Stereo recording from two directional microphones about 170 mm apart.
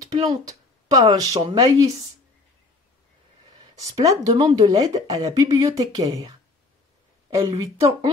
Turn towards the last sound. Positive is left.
turn(degrees=-15)  # may be behind; listen again after turning